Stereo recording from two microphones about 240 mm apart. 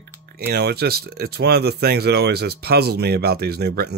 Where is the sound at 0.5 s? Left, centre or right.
Right.